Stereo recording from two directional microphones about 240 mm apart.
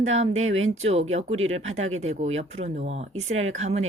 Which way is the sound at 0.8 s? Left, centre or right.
Right.